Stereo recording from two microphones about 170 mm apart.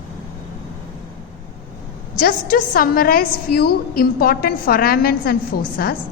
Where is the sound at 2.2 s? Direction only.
55° left (ahead or behind).